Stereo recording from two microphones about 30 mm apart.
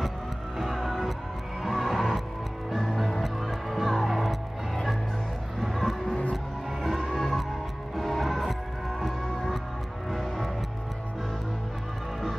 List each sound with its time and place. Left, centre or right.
0.6 s music: centre
5.6 s a sound: centre
6.3 s music: centre